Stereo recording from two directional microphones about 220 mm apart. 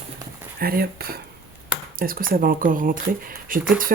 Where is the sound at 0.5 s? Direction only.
40° right (ahead or behind).